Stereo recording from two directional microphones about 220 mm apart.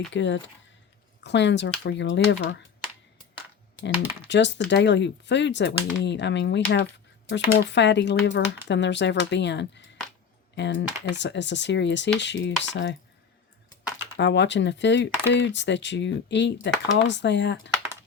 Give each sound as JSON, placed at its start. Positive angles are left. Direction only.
{"t": 0.1, "sound": "speech", "side_deg": 55}
{"t": 4.3, "sound": "speech", "side_deg": 55}
{"t": 14.2, "sound": "speech", "side_deg": 55}